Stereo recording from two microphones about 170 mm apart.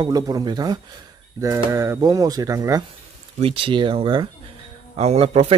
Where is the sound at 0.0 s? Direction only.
20° right (ahead or behind).